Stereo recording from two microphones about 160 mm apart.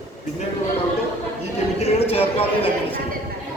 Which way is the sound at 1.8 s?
40° left (ahead or behind).